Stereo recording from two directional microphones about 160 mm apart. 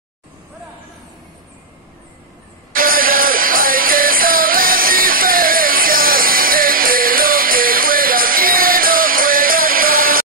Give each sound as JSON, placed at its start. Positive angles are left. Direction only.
{"t": 2.7, "sound": "music", "side_deg": -65}